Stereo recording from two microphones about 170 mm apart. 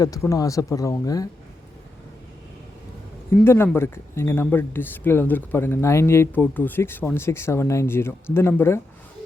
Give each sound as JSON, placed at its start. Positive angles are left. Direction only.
{"t": 0.0, "sound": "speech", "side_deg": 20}
{"t": 3.4, "sound": "speech", "side_deg": 15}